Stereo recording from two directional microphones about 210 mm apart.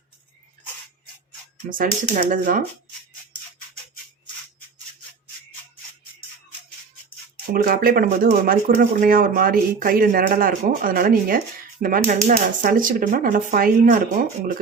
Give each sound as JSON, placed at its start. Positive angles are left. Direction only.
{"t": 1.7, "sound": "speech", "side_deg": -40}
{"t": 7.5, "sound": "speech", "side_deg": -45}